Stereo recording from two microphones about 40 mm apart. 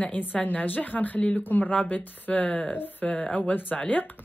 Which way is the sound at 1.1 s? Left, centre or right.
Left.